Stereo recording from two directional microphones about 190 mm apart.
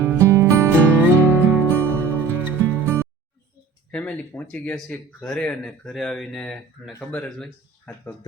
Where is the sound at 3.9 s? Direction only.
5° left (ahead or behind).